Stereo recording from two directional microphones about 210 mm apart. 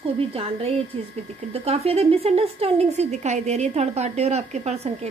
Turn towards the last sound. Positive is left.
turn(degrees=-30)  # may be behind; listen again after turning